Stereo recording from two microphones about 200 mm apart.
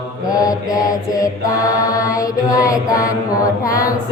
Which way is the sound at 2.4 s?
15° left (ahead or behind).